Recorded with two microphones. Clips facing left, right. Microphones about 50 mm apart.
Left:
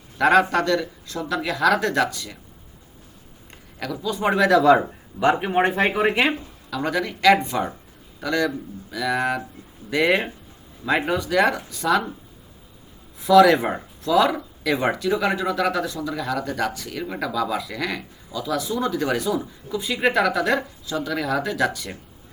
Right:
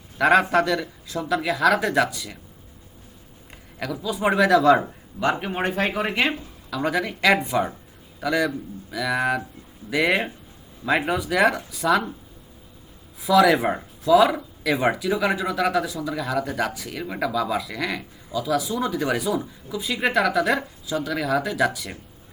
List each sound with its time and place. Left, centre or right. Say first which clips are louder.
0.2 s speech: even; centre
3.8 s speech: even; centre
4.8 s speech: left 4 dB; centre
6.7 s speech: even; centre
13.2 s speech: left 3 dB; centre